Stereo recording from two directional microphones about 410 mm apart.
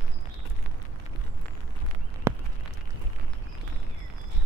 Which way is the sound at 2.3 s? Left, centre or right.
Centre.